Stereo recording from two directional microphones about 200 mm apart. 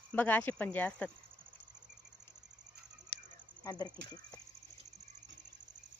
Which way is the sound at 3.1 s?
55° left (ahead or behind).